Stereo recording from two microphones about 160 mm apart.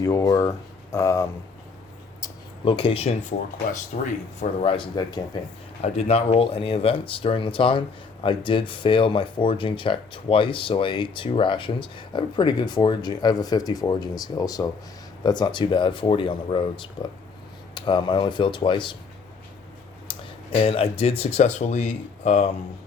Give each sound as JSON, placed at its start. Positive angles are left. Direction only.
{"t": 0.0, "sound": "speech", "side_deg": 20}
{"t": 2.6, "sound": "speech", "side_deg": 35}
{"t": 5.8, "sound": "speech", "side_deg": 40}
{"t": 20.1, "sound": "speech", "side_deg": 35}